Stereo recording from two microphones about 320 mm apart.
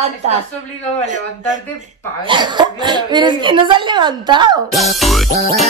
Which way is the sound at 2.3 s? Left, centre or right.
Centre.